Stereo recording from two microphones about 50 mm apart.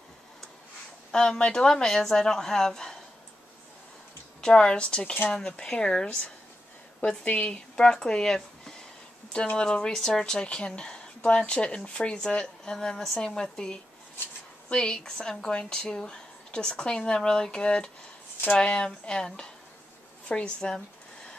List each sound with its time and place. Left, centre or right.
1.1 s speech: centre
4.4 s speech: centre